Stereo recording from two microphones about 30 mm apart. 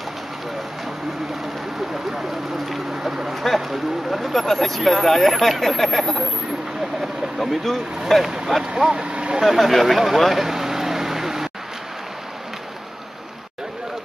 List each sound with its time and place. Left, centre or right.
2.0 s speech: centre
3.4 s speech: centre
7.0 s vehicle: centre
8.1 s speech: centre
8.7 s speech: centre
9.0 s vehicle: right
9.4 s speech: centre
10.4 s vehicle: centre